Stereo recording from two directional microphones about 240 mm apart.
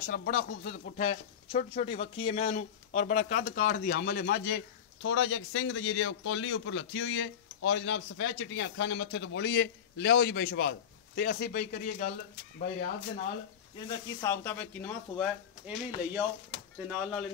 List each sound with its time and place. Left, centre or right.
0.0 s speech: left
5.0 s a man's voice: left
13.7 s speech: centre
15.6 s speech: centre